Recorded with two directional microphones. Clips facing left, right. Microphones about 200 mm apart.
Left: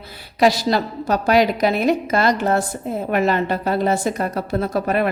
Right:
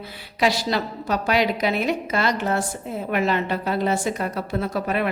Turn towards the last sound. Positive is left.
turn(degrees=40)  # may be behind; listen again after turning